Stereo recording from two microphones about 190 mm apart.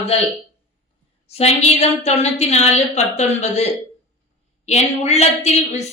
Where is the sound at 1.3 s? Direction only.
35° left (ahead or behind).